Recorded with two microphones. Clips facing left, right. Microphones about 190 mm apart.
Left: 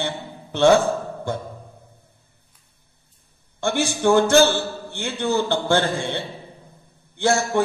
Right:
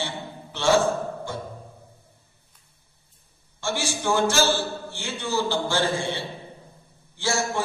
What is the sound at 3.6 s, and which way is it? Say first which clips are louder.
A man's voice: left 6 dB; 60° left (ahead or behind).